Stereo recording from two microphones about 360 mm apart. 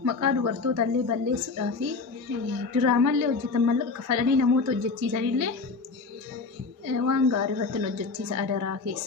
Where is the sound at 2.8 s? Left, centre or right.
Right.